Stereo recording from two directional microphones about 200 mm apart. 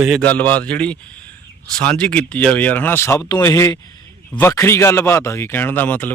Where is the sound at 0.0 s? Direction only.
5° left (ahead or behind).